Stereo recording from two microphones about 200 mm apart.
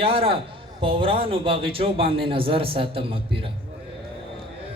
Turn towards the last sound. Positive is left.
turn(degrees=-25)  # may be behind; listen again after turning